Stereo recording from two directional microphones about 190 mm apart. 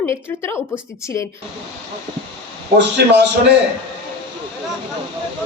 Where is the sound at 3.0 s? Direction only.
55° right (ahead or behind).